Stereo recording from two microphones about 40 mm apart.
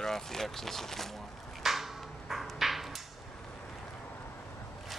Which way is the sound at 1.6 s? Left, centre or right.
Centre.